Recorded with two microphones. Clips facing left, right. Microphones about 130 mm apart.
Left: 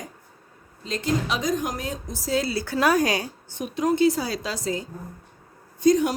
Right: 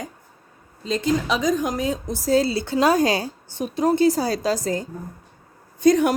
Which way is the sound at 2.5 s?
25° right (ahead or behind).